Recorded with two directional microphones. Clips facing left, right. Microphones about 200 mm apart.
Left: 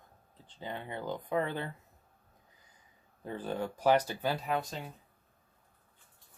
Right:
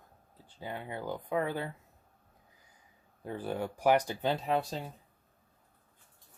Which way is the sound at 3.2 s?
10° right (ahead or behind).